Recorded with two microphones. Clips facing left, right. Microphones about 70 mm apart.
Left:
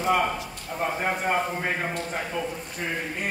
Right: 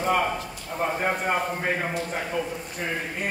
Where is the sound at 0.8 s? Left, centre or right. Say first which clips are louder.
Right 1 dB; centre.